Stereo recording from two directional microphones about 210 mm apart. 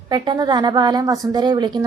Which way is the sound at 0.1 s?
20° right (ahead or behind).